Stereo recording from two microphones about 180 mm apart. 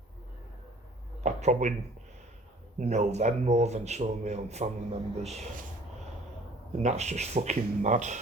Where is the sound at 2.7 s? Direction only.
40° right (ahead or behind).